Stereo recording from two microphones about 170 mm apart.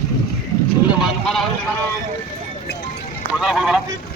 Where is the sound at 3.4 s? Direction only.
Centre (ahead or behind).